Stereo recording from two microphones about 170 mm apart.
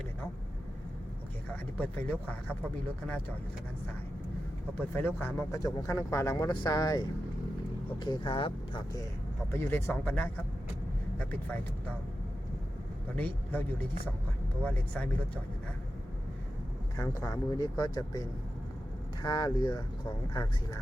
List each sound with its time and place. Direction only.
1.8 s speech: 10° left (ahead or behind)
4.9 s speech: 10° left (ahead or behind)
8.0 s speech: 25° left (ahead or behind)
9.5 s speech: 10° left (ahead or behind)
13.1 s speech: 10° left (ahead or behind)
17.0 s speech: 20° left (ahead or behind)